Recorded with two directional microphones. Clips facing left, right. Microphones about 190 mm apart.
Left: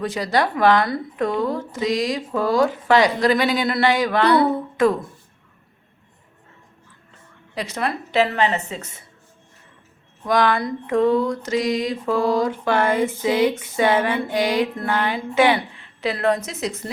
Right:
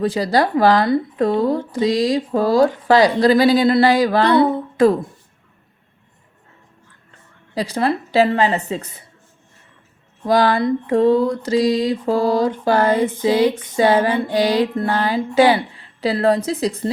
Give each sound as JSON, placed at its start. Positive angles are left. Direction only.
{"t": 0.0, "sound": "speech", "side_deg": -35}
{"t": 7.5, "sound": "speech", "side_deg": -35}
{"t": 10.2, "sound": "a woman's voice", "side_deg": -30}